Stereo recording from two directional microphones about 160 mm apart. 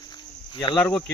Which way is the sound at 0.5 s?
30° left (ahead or behind).